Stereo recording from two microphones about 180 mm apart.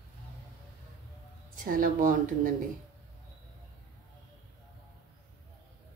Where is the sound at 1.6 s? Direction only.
50° right (ahead or behind).